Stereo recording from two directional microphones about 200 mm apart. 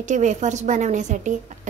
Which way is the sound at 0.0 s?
35° right (ahead or behind).